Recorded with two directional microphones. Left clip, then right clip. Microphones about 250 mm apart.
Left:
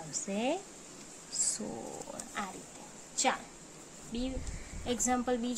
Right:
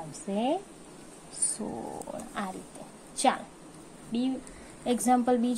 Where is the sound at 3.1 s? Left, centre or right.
Centre.